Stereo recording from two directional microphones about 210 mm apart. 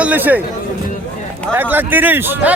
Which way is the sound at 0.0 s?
10° right (ahead or behind).